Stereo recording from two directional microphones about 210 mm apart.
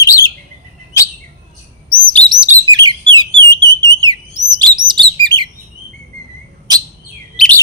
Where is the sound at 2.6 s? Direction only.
20° right (ahead or behind).